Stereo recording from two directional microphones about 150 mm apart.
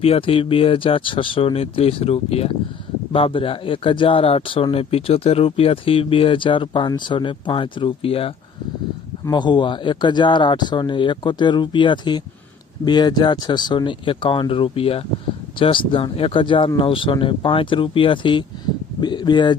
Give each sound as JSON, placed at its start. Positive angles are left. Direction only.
{"t": 0.0, "sound": "speech", "side_deg": 40}